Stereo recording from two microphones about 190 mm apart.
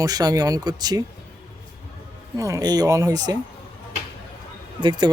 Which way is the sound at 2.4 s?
20° right (ahead or behind).